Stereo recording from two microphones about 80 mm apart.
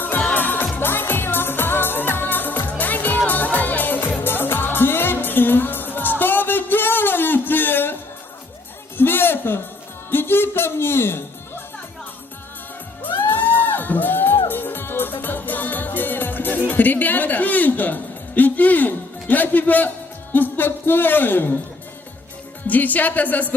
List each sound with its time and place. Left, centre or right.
0.0 s music: left
9.0 s music: left
13.2 s music: left
22.6 s a woman's voice: centre